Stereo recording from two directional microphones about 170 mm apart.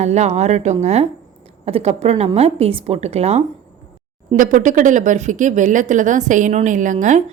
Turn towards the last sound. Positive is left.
turn(degrees=-45)  # may be behind; listen again after turning